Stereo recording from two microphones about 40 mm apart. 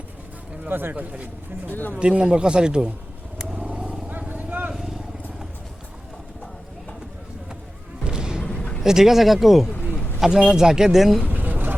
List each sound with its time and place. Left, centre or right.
0.7 s speech: right
0.9 s speech: right
2.0 s a man's voice: right
3.7 s vehicle: right
4.3 s vehicle: right
4.7 s vehicle: centre
8.0 s a sound: centre
8.4 s a sound: left
8.8 s speech: centre
11.3 s a sound: right